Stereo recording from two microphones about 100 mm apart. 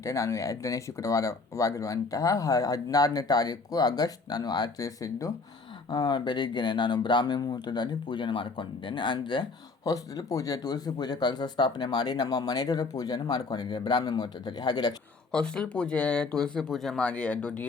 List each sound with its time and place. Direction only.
0.0 s speech: 30° left (ahead or behind); by 9.5 s 55° left (ahead or behind)
9.8 s speech: 35° left (ahead or behind)
15.3 s speech: 10° left (ahead or behind)